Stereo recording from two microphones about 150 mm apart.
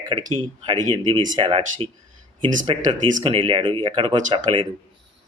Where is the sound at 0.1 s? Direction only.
30° right (ahead or behind).